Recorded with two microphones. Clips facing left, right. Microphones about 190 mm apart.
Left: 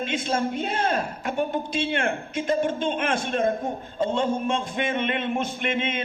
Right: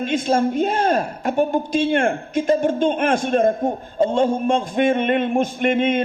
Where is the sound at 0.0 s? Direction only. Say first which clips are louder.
Right 7 dB; 45° right (ahead or behind).